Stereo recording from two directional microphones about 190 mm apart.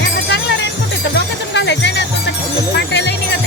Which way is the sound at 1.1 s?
65° left (ahead or behind).